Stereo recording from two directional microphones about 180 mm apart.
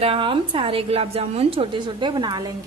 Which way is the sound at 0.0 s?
30° right (ahead or behind).